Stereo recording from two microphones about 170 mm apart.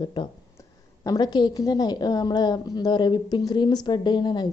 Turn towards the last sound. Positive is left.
turn(degrees=25)  # may be behind; listen again after turning